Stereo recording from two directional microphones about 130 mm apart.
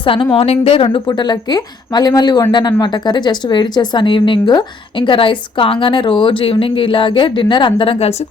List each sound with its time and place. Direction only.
0.0 s speech: 40° left (ahead or behind)